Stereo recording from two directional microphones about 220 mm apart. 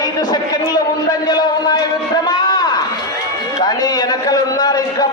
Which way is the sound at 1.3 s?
20° left (ahead or behind).